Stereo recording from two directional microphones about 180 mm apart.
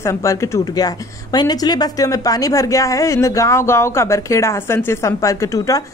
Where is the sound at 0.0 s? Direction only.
15° left (ahead or behind).